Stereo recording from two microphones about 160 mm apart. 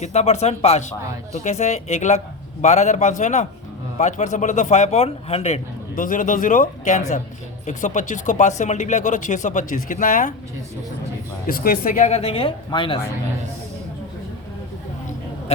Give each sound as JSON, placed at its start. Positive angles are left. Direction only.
{"t": 0.0, "sound": "speech", "side_deg": 45}
{"t": 6.0, "sound": "speech", "side_deg": 55}
{"t": 11.4, "sound": "speech", "side_deg": 65}